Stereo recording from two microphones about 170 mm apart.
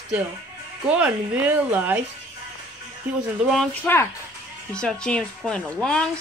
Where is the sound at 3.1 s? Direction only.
10° right (ahead or behind).